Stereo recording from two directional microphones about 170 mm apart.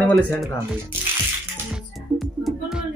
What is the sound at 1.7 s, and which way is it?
Music, centre (ahead or behind).